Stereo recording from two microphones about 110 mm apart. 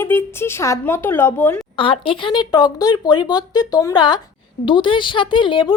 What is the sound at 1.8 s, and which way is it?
A woman's voice, 55° left (ahead or behind).